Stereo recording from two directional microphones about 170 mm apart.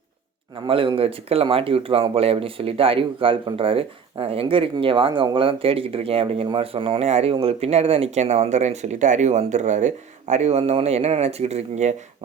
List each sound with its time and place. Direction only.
0.7 s speech: 30° right (ahead or behind)